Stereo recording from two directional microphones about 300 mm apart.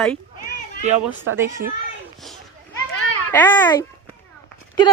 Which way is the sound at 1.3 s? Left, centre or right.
Right.